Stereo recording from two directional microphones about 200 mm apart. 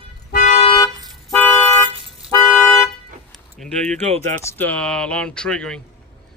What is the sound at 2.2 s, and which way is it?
Toot, 5° right (ahead or behind).